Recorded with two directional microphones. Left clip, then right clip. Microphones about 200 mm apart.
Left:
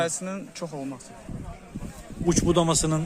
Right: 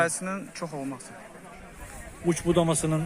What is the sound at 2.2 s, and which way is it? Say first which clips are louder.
Speech: left 2 dB; 5° left (ahead or behind).